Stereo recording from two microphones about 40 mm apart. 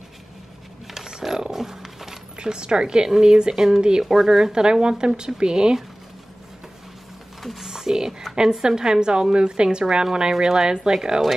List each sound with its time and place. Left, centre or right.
0.9 s a sound: centre
2.3 s speech: right
4.0 s speech: centre
7.4 s typing: centre
8.4 s speech: centre